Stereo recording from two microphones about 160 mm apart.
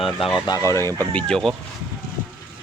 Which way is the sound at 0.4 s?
20° left (ahead or behind).